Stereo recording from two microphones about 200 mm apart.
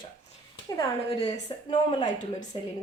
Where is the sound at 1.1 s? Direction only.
25° left (ahead or behind).